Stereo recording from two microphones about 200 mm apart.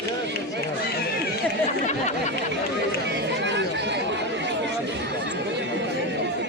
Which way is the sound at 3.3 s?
60° right (ahead or behind).